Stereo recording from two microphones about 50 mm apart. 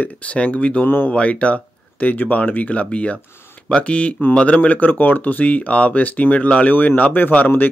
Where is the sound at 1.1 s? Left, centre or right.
Left.